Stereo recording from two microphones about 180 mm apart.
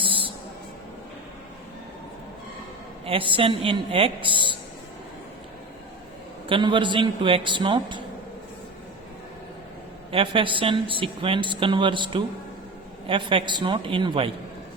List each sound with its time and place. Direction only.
0.0 s a sound: 30° right (ahead or behind)
3.1 s a woman's voice: 30° right (ahead or behind)
6.5 s a woman's voice: 25° right (ahead or behind)
10.1 s a woman's voice: 30° right (ahead or behind)